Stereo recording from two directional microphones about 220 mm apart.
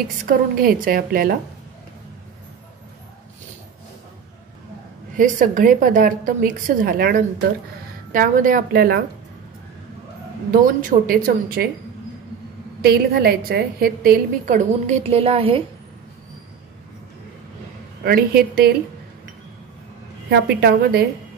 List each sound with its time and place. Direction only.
0.2 s a woman's voice: 40° right (ahead or behind)
5.1 s a woman's voice: 35° right (ahead or behind)
10.6 s a woman's voice: 40° right (ahead or behind)
12.8 s a woman's voice: 45° right (ahead or behind); by 15.6 s 25° right (ahead or behind)
18.0 s a woman's voice: 45° right (ahead or behind)
20.2 s a woman's voice: 45° right (ahead or behind)